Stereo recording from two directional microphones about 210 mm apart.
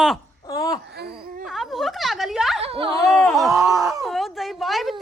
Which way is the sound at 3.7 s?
15° right (ahead or behind).